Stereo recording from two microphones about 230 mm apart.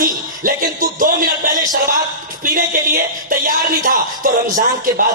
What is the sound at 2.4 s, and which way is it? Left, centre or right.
A man's voice, right.